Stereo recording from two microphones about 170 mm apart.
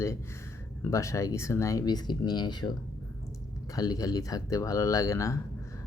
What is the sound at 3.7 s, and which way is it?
Speech, 20° left (ahead or behind).